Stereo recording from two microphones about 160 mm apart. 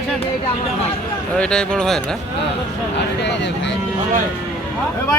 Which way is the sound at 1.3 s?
5° left (ahead or behind).